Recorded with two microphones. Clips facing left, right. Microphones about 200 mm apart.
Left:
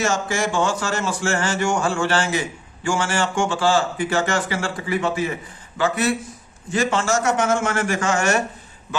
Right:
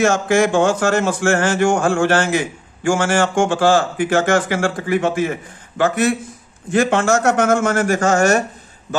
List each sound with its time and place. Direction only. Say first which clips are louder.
0.0 s speech: right 7 dB; 55° right (ahead or behind)